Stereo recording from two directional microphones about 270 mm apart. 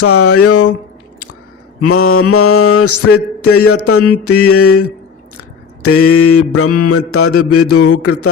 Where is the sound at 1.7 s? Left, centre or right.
Left.